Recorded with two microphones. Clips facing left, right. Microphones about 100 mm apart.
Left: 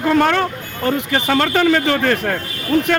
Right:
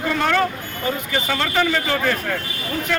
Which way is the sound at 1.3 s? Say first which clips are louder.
Left 6 dB; 45° left (ahead or behind).